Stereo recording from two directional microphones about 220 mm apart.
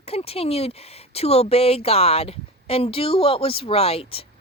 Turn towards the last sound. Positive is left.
turn(degrees=25)  # may be behind; listen again after turning